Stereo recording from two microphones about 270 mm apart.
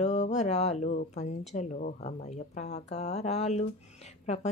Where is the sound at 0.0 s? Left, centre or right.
Left.